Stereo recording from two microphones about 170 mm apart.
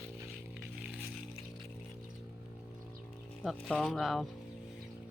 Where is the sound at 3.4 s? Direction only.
Centre (ahead or behind).